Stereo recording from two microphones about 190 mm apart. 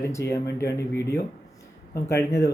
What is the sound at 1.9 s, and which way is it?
Speech, 15° left (ahead or behind).